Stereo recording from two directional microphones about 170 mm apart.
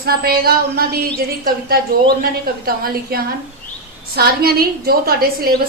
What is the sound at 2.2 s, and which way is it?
A woman's voice, 60° right (ahead or behind).